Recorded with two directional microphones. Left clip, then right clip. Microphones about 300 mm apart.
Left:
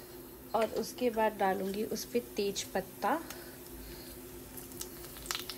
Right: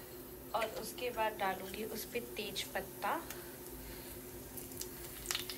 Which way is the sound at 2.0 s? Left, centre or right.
Centre.